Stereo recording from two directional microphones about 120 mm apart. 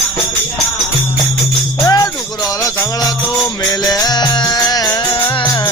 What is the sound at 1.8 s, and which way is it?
Music, 30° left (ahead or behind).